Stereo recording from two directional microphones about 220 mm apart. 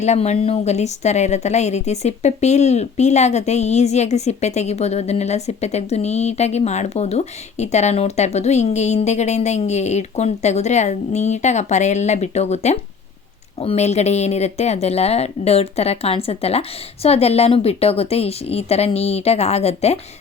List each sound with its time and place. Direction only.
0.0 s a woman's voice: 30° left (ahead or behind)